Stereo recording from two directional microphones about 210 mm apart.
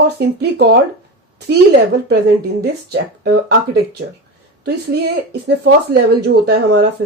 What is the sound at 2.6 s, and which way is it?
Speech, 50° right (ahead or behind).